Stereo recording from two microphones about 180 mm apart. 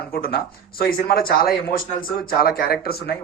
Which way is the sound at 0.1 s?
55° left (ahead or behind).